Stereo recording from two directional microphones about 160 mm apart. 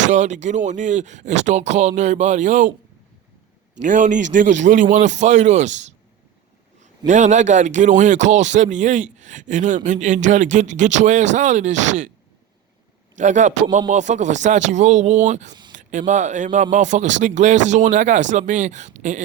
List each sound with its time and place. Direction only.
0.1 s speech: 50° right (ahead or behind)
3.8 s speech: 55° right (ahead or behind)
7.1 s speech: 50° right (ahead or behind)
13.1 s speech: 50° right (ahead or behind)